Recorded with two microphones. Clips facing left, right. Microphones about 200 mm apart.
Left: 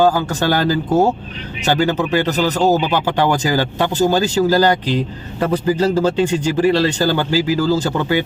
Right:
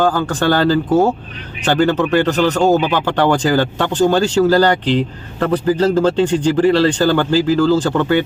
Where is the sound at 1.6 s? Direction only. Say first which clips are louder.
Right 2 dB; 5° left (ahead or behind).